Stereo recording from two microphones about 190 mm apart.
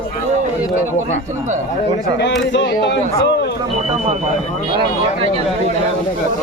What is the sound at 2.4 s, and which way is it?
Speech, 70° left (ahead or behind).